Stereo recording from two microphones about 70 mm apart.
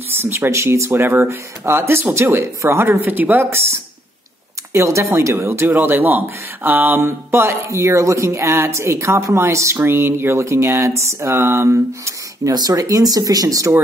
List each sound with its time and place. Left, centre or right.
0.1 s speech: right
4.7 s speech: right
7.0 s speech: right
12.5 s speech: right